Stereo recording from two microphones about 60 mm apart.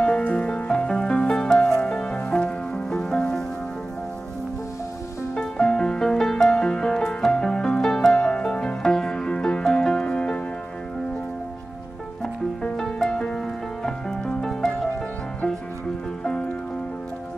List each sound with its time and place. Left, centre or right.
0.0 s music: centre
5.3 s music: centre
12.2 s music: centre